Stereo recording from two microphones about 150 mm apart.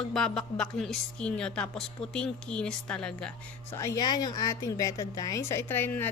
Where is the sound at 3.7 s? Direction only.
20° left (ahead or behind).